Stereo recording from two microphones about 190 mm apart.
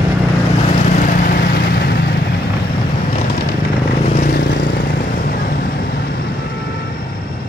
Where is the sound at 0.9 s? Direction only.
45° left (ahead or behind).